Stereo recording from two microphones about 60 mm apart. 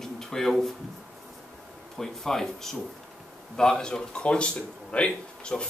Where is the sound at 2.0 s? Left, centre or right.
Centre.